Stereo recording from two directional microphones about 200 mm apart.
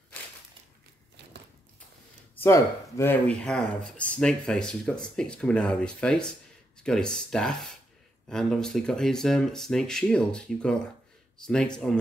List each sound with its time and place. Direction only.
2.3 s speech: 10° left (ahead or behind)